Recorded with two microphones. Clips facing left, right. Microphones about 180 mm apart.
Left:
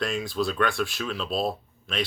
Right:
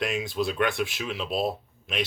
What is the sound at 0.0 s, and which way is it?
Speech, 20° right (ahead or behind).